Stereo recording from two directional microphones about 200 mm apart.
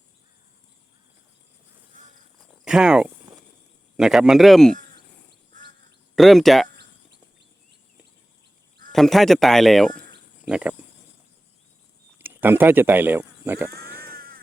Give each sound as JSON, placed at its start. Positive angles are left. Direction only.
{"t": 2.5, "sound": "cricket", "side_deg": -5}
{"t": 3.9, "sound": "speech", "side_deg": 0}
{"t": 6.1, "sound": "speech", "side_deg": 0}
{"t": 8.9, "sound": "speech", "side_deg": 0}
{"t": 12.2, "sound": "speech", "side_deg": -10}
{"t": 14.0, "sound": "vehicle", "side_deg": -50}